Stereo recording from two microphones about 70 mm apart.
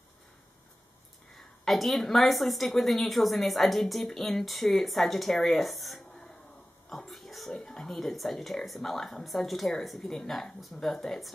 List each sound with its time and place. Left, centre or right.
1.3 s a woman's voice: centre